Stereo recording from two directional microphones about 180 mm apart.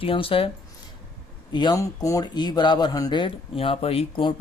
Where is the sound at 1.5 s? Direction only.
20° left (ahead or behind).